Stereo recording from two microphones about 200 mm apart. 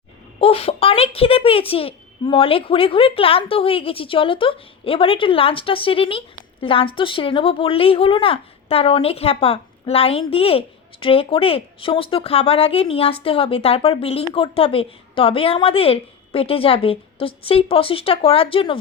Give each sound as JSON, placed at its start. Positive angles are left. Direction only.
{"t": 0.3, "sound": "speech", "side_deg": 30}